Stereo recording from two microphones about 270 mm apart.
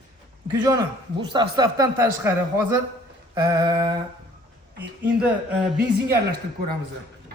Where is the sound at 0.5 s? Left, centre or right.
Centre.